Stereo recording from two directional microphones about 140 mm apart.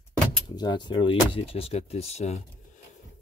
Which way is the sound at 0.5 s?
30° left (ahead or behind).